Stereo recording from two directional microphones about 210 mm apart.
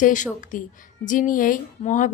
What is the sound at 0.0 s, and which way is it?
A woman's voice, 35° left (ahead or behind).